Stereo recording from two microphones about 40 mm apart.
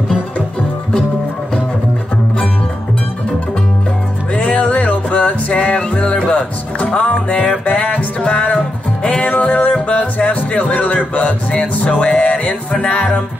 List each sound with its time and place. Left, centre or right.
4.4 s music: left